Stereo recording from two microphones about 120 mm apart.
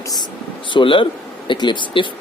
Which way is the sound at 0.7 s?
45° left (ahead or behind).